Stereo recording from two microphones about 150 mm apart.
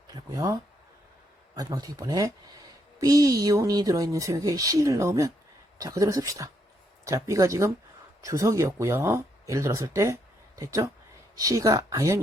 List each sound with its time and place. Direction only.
0.1 s speech: 20° right (ahead or behind)